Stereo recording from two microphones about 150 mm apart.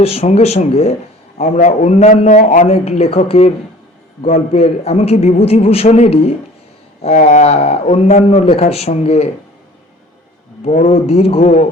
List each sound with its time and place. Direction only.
0.0 s a man's voice: 40° left (ahead or behind)
10.6 s a man's voice: 45° left (ahead or behind)